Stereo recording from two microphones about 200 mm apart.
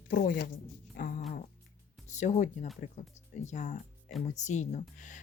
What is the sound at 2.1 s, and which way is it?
Speech, 35° left (ahead or behind).